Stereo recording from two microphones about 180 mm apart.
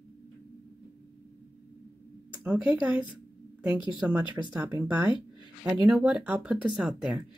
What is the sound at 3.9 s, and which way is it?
Speech, 5° right (ahead or behind).